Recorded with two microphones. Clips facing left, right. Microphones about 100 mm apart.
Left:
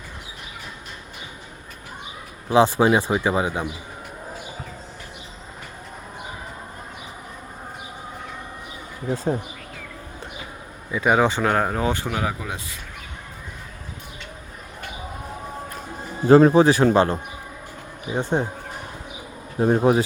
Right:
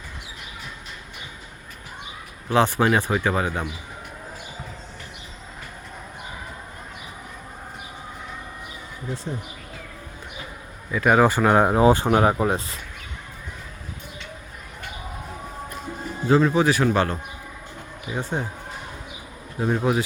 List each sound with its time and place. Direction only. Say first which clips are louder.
2.5 s speech: left 3 dB; 15° left (ahead or behind)
9.0 s speech: left 8 dB; 50° left (ahead or behind)
10.9 s speech: right 1 dB; 5° left (ahead or behind)
11.2 s speech: right 3 dB; 5° right (ahead or behind)
11.6 s speech: right 6 dB; 20° right (ahead or behind)
11.9 s speech: right 7 dB; 40° right (ahead or behind)
16.3 s a man's voice: left 6 dB; 40° left (ahead or behind); by 18.4 s 20° left (ahead or behind)
19.5 s a man's voice: left 5 dB; 35° left (ahead or behind)